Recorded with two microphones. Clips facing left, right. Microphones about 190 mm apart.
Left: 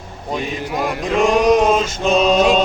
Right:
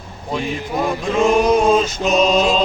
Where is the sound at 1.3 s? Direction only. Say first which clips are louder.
Left 1 dB; 90° left.